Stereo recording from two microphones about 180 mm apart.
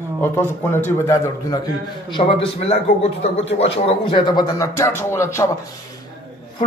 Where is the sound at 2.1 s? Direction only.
30° left (ahead or behind).